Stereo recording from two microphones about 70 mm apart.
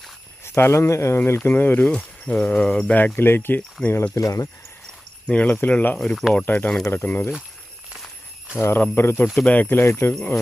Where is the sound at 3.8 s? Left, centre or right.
Centre.